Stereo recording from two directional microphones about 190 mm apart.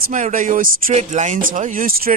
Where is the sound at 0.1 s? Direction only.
45° right (ahead or behind).